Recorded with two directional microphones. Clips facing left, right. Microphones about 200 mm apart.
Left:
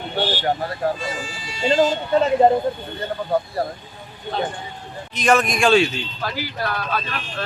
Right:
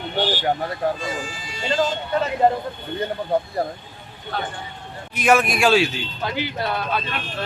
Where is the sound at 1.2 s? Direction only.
50° right (ahead or behind).